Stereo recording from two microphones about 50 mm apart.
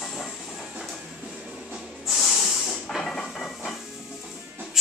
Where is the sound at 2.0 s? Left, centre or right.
Centre.